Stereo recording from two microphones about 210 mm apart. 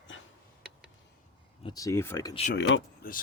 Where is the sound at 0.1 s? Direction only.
65° left (ahead or behind).